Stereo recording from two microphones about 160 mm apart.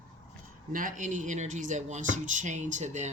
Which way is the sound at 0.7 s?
55° right (ahead or behind).